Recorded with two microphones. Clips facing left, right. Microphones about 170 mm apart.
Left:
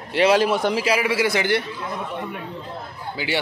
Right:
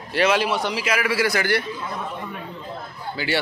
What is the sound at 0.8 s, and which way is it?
Speech, 25° left (ahead or behind).